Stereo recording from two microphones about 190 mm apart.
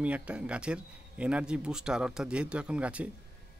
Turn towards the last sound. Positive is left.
turn(degrees=-5)  # may be behind; listen again after turning